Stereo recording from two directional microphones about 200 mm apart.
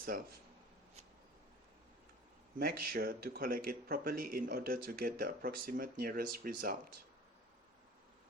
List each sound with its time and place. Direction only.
0.0 s speech: 45° right (ahead or behind)
2.6 s a man's voice: 45° right (ahead or behind)